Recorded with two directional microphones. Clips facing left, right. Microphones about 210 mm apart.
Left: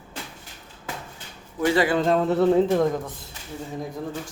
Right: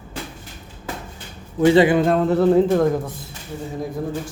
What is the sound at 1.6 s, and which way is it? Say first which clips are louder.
Speech: right 7 dB; 25° right (ahead or behind).